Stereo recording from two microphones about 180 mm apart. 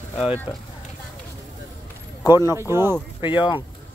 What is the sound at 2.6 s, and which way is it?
Speech, 15° right (ahead or behind).